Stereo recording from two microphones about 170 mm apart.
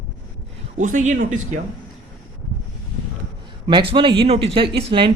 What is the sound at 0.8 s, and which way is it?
Speech, 45° right (ahead or behind).